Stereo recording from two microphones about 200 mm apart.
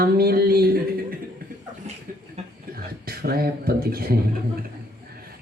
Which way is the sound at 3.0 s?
50° right (ahead or behind).